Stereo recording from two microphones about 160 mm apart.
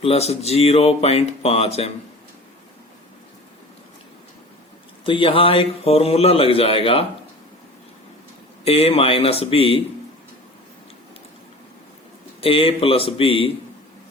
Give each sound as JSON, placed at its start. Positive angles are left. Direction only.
{"t": 0.0, "sound": "a man's voice", "side_deg": 40}
{"t": 5.0, "sound": "a man's voice", "side_deg": 35}
{"t": 8.6, "sound": "a man's voice", "side_deg": 40}
{"t": 12.4, "sound": "a man's voice", "side_deg": 35}